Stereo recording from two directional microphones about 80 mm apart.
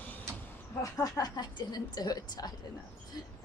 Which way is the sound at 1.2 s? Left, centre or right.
Left.